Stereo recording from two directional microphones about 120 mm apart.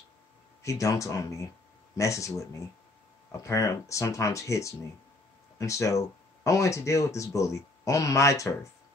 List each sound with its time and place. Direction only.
0.6 s speech: 25° left (ahead or behind)